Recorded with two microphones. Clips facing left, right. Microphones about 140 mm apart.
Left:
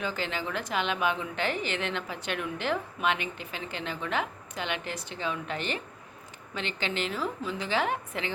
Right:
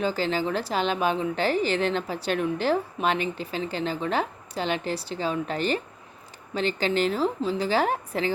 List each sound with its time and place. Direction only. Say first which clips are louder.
0.0 s a woman's voice: right 7 dB; 35° right (ahead or behind)